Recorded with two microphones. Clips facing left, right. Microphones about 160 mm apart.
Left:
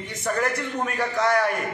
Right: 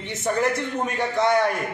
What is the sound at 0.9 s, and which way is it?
Speech, 25° right (ahead or behind).